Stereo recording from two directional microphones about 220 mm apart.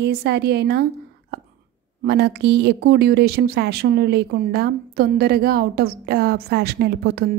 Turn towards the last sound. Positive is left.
turn(degrees=-45)  # may be behind; listen again after turning